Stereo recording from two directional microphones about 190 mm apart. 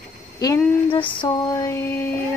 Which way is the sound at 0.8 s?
25° left (ahead or behind).